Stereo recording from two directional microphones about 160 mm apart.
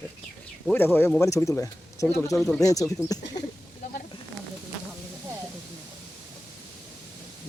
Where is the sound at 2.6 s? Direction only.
20° left (ahead or behind).